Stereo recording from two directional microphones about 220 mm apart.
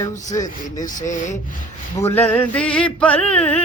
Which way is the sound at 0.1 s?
35° left (ahead or behind).